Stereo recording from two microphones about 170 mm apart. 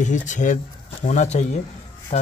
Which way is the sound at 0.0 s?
45° left (ahead or behind).